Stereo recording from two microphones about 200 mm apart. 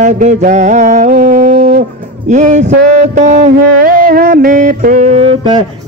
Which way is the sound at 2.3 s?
35° right (ahead or behind).